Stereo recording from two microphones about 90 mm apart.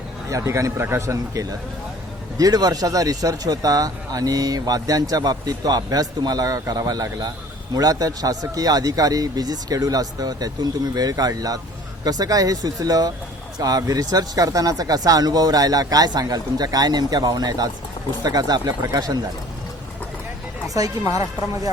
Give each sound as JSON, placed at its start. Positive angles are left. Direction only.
{"t": 0.3, "sound": "a man's voice", "side_deg": -35}
{"t": 20.7, "sound": "a man's voice", "side_deg": -40}